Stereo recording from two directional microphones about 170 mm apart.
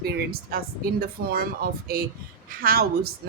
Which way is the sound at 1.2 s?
65° right (ahead or behind).